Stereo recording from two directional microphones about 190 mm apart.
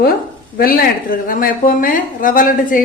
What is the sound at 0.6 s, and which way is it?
A woman's voice, 50° left (ahead or behind).